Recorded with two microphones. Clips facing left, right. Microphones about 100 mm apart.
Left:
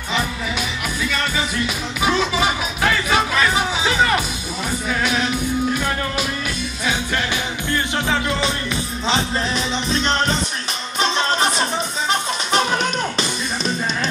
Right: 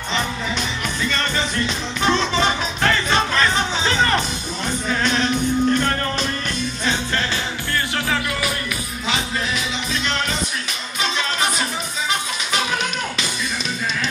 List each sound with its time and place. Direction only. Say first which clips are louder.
0.1 s music: left 1 dB; 10° left (ahead or behind)
7.7 s music: left 2 dB; 25° left (ahead or behind)
9.0 s music: left 3 dB; 35° left (ahead or behind)